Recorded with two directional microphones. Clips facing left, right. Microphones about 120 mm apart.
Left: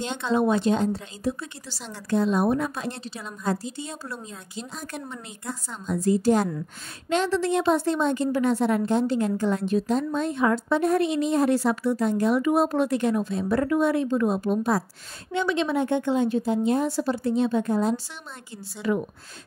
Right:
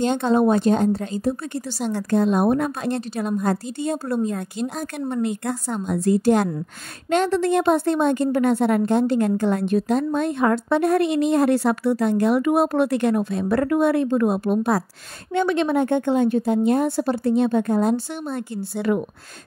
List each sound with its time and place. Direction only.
0.0 s a woman's voice: 50° right (ahead or behind); by 6.5 s 65° right (ahead or behind)
7.1 s a woman's voice: 55° right (ahead or behind)
15.3 s a woman's voice: 55° right (ahead or behind)